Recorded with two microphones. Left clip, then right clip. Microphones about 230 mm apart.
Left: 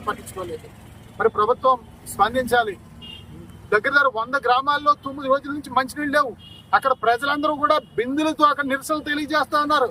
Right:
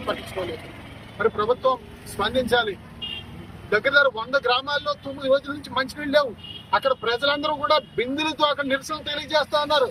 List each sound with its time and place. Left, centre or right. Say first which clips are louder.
1.2 s speech: left 3 dB; centre